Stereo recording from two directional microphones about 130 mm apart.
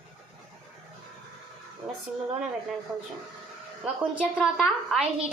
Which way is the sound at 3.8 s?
10° right (ahead or behind).